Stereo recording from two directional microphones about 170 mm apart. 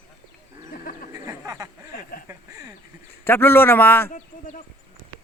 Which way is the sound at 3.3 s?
15° left (ahead or behind).